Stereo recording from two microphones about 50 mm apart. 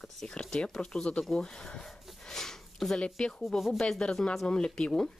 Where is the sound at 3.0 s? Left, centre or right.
Centre.